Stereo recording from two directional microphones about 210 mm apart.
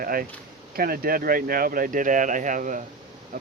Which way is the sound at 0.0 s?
45° right (ahead or behind).